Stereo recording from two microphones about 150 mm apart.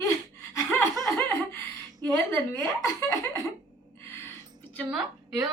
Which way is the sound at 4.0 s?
15° left (ahead or behind).